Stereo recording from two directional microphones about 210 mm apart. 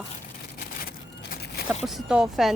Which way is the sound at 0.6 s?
40° left (ahead or behind).